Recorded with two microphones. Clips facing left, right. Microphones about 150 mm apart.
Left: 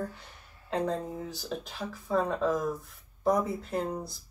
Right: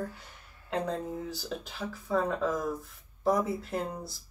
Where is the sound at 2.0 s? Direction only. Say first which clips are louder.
Left 1 dB; centre (ahead or behind).